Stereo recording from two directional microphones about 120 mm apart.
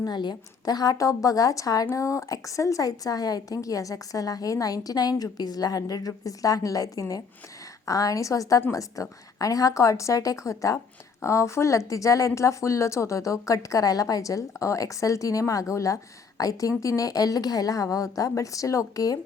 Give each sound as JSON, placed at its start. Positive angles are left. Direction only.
{"t": 0.0, "sound": "a woman's voice", "side_deg": 35}